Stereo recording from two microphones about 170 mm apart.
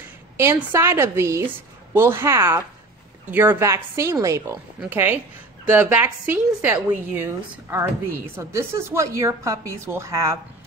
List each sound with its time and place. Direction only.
0.4 s a woman's voice: 15° right (ahead or behind)